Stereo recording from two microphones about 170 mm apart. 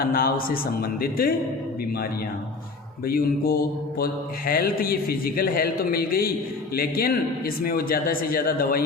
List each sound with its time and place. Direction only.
0.0 s mantra: 60° left (ahead or behind)
3.1 s mantra: 60° left (ahead or behind)